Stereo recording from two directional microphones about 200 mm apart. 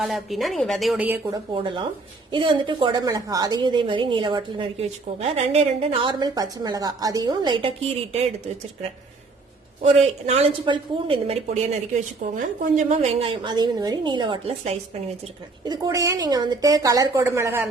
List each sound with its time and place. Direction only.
0.0 s speech: centre (ahead or behind)
1.5 s a woman's voice: 25° right (ahead or behind)
9.8 s a woman's voice: 30° right (ahead or behind); by 17.7 s 10° right (ahead or behind)